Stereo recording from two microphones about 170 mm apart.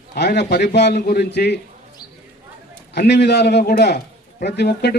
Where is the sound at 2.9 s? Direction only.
75° left (ahead or behind).